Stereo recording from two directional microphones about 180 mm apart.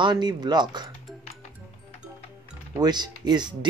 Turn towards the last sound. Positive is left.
turn(degrees=-25)  # may be behind; listen again after turning